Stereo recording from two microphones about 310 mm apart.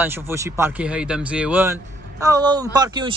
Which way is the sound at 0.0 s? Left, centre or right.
Centre.